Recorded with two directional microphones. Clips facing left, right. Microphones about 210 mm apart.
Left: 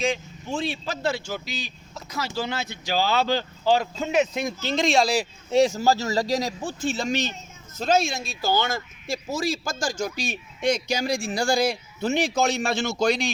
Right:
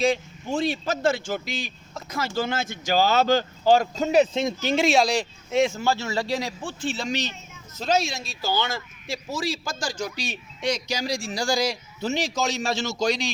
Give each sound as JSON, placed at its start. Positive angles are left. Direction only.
{"t": 0.0, "sound": "a man's voice", "side_deg": -40}
{"t": 4.6, "sound": "speech", "side_deg": -10}
{"t": 5.5, "sound": "a man's voice", "side_deg": 35}